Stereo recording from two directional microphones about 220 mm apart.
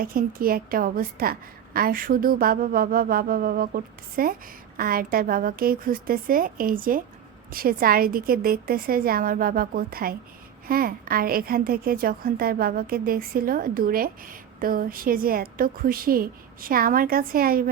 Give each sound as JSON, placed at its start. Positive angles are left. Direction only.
{"t": 0.0, "sound": "a woman's voice", "side_deg": -40}